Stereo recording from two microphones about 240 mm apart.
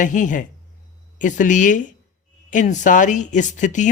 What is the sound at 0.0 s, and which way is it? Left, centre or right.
Speech, left.